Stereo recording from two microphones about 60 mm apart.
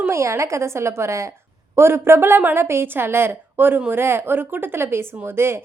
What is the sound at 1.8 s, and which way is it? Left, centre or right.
A woman's voice, right.